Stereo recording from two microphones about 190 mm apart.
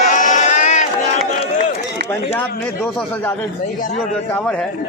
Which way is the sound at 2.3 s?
5° left (ahead or behind).